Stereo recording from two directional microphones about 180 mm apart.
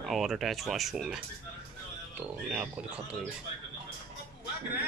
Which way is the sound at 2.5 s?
5° right (ahead or behind).